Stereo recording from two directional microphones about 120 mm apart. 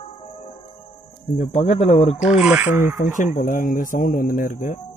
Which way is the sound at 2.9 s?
90° left.